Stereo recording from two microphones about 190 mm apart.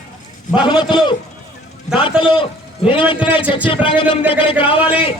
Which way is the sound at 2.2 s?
25° left (ahead or behind).